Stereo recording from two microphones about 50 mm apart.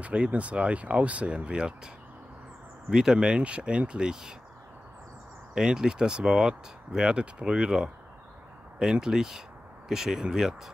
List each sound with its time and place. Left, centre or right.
0.0 s speech: right
2.9 s speech: centre
5.5 s speech: centre
9.0 s speech: centre